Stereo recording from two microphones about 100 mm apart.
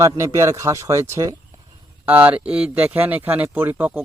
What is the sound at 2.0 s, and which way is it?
Speech, 15° right (ahead or behind).